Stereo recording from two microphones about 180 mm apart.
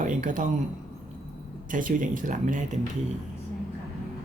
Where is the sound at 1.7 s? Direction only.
50° right (ahead or behind).